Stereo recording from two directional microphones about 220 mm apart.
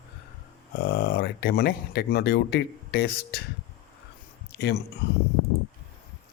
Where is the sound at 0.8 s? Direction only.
45° left (ahead or behind).